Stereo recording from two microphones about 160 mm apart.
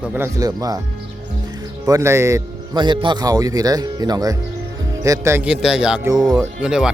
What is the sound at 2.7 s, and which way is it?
A man's voice, 30° right (ahead or behind).